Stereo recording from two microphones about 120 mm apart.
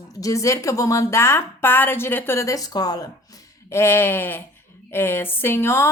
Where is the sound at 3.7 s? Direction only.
20° left (ahead or behind).